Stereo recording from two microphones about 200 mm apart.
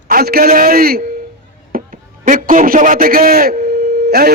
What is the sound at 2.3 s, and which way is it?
A man's voice, 40° right (ahead or behind).